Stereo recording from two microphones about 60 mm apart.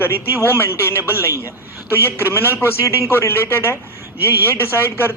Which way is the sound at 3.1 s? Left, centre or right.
Left.